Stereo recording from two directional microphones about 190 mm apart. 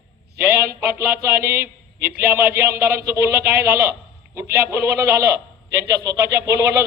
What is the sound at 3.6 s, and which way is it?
A man's voice, 15° right (ahead or behind).